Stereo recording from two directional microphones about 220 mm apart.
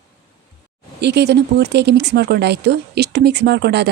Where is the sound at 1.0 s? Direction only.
50° right (ahead or behind).